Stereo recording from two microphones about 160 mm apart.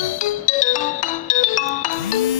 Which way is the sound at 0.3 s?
50° left (ahead or behind).